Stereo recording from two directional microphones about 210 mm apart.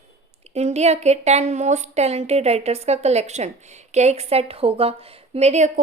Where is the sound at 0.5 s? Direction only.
30° right (ahead or behind).